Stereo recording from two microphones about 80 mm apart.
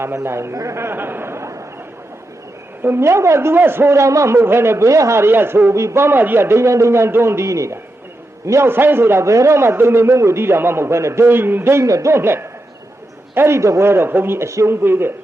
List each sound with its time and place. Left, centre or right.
0.0 s a man's voice: right
2.8 s a man's voice: right